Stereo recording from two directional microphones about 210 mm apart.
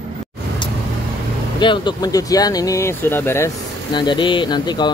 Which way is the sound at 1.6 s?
20° left (ahead or behind).